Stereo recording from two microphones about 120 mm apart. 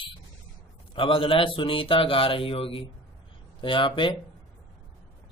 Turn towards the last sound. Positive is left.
turn(degrees=40)  # may be behind; listen again after turning